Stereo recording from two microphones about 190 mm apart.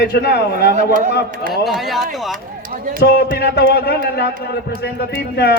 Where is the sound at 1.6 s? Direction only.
Centre (ahead or behind).